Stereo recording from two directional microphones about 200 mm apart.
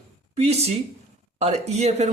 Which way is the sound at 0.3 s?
30° right (ahead or behind).